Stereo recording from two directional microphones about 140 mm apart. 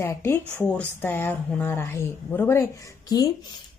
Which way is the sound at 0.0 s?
20° left (ahead or behind).